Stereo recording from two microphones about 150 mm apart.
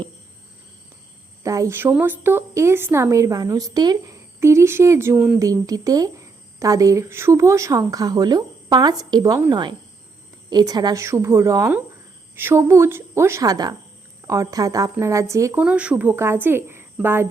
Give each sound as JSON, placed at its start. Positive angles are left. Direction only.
{"t": 1.5, "sound": "a woman's voice", "side_deg": -20}
{"t": 5.4, "sound": "a woman's voice", "side_deg": -25}
{"t": 15.6, "sound": "a woman's voice", "side_deg": -5}